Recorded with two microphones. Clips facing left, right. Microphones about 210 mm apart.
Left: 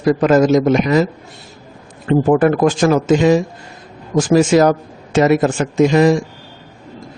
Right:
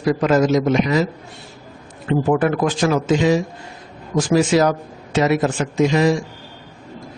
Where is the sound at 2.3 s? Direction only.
45° left (ahead or behind).